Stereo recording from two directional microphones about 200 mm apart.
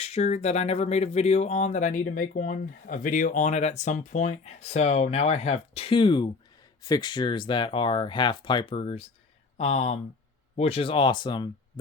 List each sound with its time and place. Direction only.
0.0 s speech: 30° left (ahead or behind)